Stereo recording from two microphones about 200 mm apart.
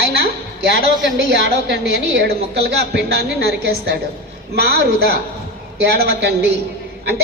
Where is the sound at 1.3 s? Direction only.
55° right (ahead or behind).